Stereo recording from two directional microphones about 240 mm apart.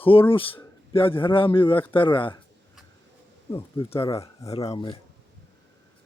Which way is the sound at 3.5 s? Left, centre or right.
Left.